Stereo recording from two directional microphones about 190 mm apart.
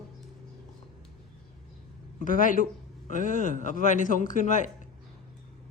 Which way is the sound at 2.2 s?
45° left (ahead or behind).